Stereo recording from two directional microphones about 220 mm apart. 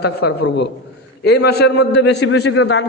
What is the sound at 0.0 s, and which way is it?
A man's voice, 50° left (ahead or behind).